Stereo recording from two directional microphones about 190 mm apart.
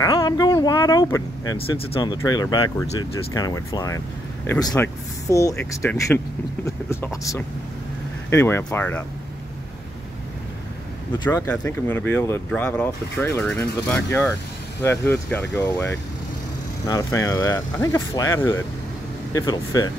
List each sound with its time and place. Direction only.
0.0 s speech: 20° left (ahead or behind)
11.2 s speech: 10° left (ahead or behind)